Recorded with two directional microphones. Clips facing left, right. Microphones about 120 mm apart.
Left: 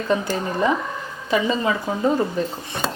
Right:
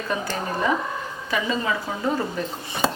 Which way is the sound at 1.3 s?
25° left (ahead or behind).